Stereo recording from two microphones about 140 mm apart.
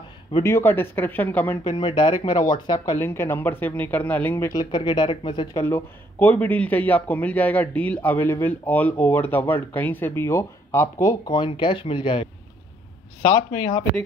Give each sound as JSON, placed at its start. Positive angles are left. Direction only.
{"t": 0.4, "sound": "a man's voice", "side_deg": 20}
{"t": 1.8, "sound": "a man's voice", "side_deg": 35}
{"t": 4.6, "sound": "speech", "side_deg": 30}
{"t": 5.6, "sound": "a man's voice", "side_deg": 15}
{"t": 11.3, "sound": "speech", "side_deg": 35}